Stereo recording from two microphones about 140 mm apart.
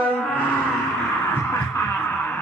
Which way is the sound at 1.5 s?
15° left (ahead or behind).